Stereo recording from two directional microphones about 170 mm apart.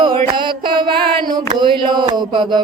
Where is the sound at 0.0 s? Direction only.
30° right (ahead or behind).